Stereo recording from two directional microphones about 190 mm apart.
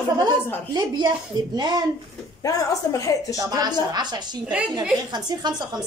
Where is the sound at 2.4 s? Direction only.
15° left (ahead or behind).